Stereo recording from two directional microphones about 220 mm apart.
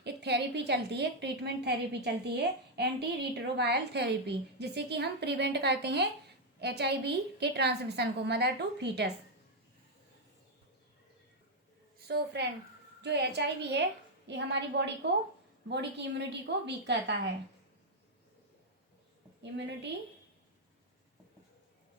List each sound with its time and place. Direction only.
0.0 s a woman's voice: 50° right (ahead or behind)
12.0 s a woman's voice: 50° right (ahead or behind)
19.4 s a woman's voice: 50° right (ahead or behind)